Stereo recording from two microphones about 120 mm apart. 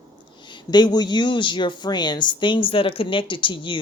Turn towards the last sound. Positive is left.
turn(degrees=40)  # may be behind; listen again after turning